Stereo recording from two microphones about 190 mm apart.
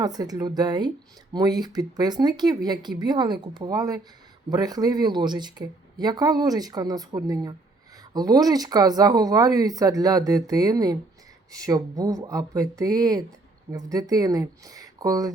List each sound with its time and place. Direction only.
0.0 s speech: 20° right (ahead or behind)